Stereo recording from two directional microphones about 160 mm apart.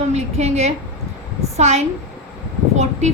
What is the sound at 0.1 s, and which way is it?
A woman's voice, 40° right (ahead or behind).